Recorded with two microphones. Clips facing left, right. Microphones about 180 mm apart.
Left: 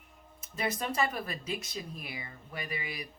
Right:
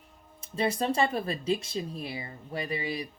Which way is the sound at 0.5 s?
30° right (ahead or behind).